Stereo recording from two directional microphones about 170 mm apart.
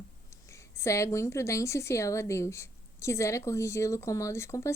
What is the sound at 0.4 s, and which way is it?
A woman's voice, 15° left (ahead or behind).